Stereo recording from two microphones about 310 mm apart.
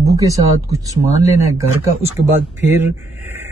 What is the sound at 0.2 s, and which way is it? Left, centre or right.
Speech, centre.